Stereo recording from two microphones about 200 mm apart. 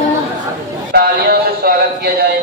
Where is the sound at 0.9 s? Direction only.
50° right (ahead or behind).